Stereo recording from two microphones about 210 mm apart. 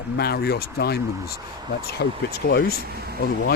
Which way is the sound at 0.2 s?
50° left (ahead or behind).